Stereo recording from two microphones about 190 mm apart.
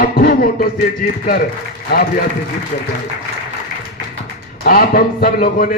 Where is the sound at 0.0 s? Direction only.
50° left (ahead or behind).